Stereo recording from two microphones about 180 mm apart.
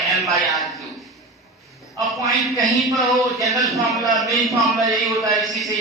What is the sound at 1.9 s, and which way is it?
A man's voice, centre (ahead or behind).